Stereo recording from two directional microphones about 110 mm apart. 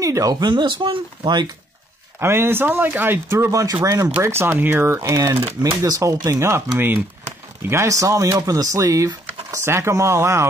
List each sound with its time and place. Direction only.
0.0 s speech: 30° right (ahead or behind)
2.1 s speech: 20° right (ahead or behind)